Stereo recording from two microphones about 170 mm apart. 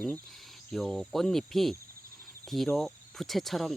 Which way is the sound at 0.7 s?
Centre (ahead or behind).